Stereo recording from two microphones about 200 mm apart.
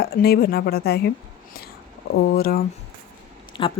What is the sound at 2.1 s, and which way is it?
Speech, 50° left (ahead or behind).